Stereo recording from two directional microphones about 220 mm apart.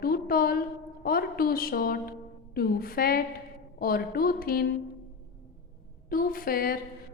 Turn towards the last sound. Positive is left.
turn(degrees=40)  # may be behind; listen again after turning